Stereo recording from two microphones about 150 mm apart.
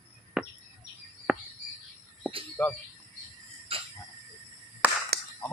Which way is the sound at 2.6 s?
10° left (ahead or behind).